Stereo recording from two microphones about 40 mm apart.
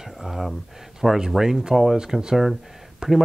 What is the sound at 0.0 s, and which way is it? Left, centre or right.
Speech, centre.